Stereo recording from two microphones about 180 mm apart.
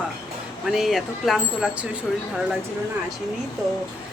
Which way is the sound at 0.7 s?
Centre (ahead or behind).